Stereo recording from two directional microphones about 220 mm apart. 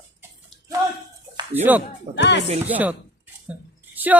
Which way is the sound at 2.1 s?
50° left (ahead or behind).